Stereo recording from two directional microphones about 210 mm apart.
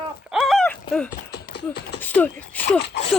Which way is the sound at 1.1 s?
45° left (ahead or behind).